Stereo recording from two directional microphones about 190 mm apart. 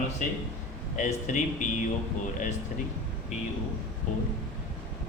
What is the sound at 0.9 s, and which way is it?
Speech, 40° left (ahead or behind).